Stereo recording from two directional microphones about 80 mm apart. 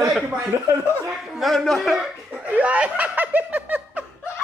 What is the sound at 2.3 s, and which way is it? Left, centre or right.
Snicker, centre.